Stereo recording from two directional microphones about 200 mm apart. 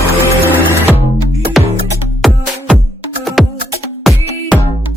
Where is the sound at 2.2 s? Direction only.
Centre (ahead or behind).